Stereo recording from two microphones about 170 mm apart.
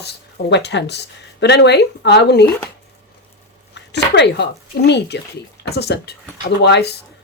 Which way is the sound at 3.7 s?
90° left.